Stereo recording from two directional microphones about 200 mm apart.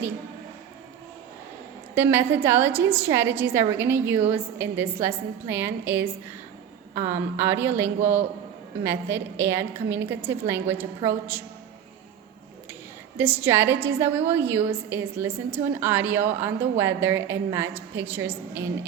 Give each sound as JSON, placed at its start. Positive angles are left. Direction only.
{"t": 2.0, "sound": "a woman's voice", "side_deg": -10}
{"t": 13.1, "sound": "a woman's voice", "side_deg": -10}